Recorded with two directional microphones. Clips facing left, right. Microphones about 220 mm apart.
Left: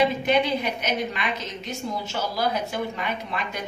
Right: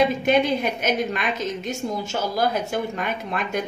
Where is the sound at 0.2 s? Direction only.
50° right (ahead or behind).